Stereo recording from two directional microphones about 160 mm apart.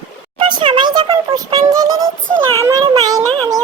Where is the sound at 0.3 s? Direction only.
30° right (ahead or behind).